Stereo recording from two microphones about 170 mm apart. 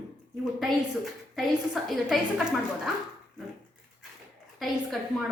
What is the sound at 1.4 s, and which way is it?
A woman's voice, centre (ahead or behind).